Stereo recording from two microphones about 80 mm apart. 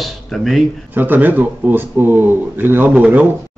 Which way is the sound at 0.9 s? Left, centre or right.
Right.